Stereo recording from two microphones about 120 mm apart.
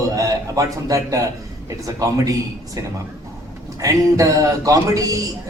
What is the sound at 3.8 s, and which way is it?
A man's voice, 30° right (ahead or behind).